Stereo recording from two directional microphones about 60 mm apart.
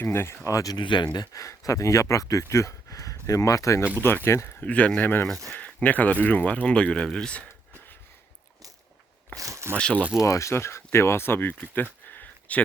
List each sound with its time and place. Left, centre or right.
0.0 s speech: left
0.4 s speech: left
4.0 s speech: left
4.3 s speech: left
4.6 s speech: left
9.3 s speech: right
9.9 s speech: right
10.2 s speech: left
11.7 s a sound: left